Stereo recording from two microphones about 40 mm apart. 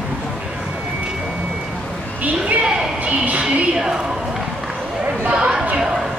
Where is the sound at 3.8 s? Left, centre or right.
Centre.